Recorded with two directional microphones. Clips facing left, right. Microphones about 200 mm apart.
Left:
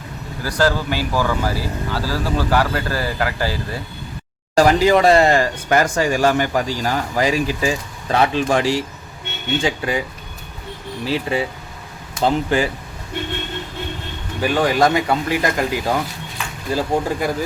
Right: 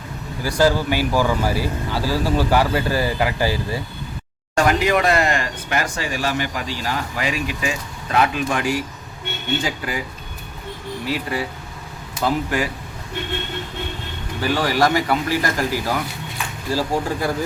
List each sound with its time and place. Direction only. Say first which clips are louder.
0.4 s speech: right 1 dB; 10° right (ahead or behind)
4.5 s speech: left 4 dB; 35° left (ahead or behind)
11.0 s speech: left 4 dB; 25° left (ahead or behind)
14.4 s speech: left 3 dB; 20° left (ahead or behind)